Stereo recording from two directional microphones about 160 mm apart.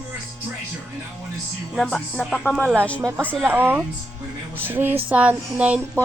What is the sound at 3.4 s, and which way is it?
Speech, 15° right (ahead or behind).